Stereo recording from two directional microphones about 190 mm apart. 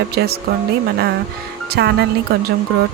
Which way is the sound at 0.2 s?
60° right (ahead or behind).